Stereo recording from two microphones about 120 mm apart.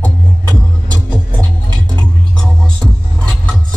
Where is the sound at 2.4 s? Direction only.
5° left (ahead or behind).